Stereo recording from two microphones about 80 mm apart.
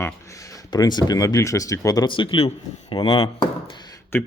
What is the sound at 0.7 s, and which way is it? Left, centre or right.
Speech, left.